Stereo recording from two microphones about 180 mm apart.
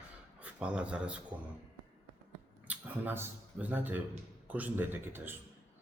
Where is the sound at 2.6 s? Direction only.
10° right (ahead or behind).